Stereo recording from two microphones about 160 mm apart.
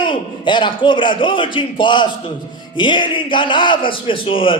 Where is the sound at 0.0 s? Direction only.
30° left (ahead or behind).